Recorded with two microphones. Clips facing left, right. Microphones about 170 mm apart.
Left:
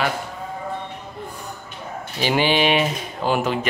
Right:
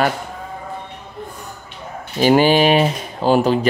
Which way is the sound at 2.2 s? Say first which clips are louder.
Right 7 dB; 45° right (ahead or behind).